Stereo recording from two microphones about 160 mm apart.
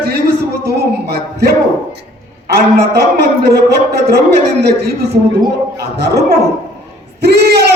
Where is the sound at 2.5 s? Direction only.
90° right.